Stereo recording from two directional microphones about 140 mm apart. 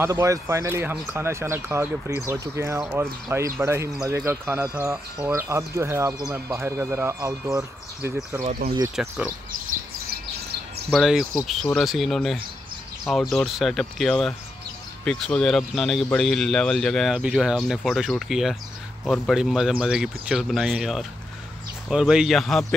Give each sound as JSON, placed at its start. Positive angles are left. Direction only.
{"t": 0.0, "sound": "speech", "side_deg": -20}
{"t": 8.5, "sound": "speech", "side_deg": -90}
{"t": 9.0, "sound": "speech", "side_deg": -5}
{"t": 9.7, "sound": "chirp", "side_deg": -90}
{"t": 10.9, "sound": "speech", "side_deg": -5}